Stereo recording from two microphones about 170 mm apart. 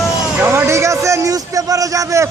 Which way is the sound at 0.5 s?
15° right (ahead or behind).